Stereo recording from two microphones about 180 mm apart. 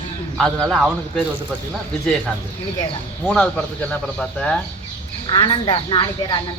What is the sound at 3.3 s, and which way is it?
A man's voice, 5° left (ahead or behind).